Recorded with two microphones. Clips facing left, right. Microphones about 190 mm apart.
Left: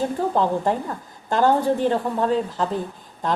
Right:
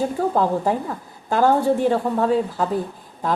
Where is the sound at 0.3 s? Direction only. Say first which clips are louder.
Even; 10° right (ahead or behind).